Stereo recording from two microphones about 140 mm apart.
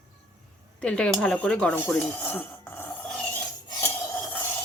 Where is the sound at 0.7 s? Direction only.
10° left (ahead or behind).